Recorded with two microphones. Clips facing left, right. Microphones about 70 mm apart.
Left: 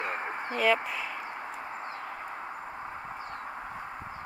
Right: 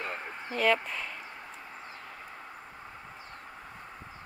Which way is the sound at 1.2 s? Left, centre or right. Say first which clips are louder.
Left 7 dB; left.